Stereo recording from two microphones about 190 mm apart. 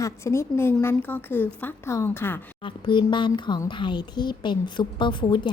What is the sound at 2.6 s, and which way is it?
Speech, 25° left (ahead or behind).